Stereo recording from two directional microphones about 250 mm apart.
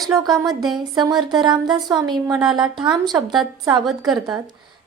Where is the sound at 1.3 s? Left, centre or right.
Centre.